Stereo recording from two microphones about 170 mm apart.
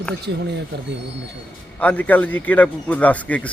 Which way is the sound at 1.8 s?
10° left (ahead or behind).